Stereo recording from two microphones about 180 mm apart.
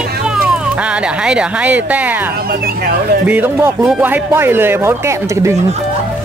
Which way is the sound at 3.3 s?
10° right (ahead or behind).